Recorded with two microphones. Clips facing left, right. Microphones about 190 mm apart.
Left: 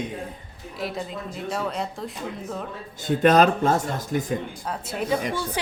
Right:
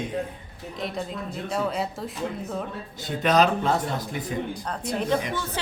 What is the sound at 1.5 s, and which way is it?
Speech, centre (ahead or behind).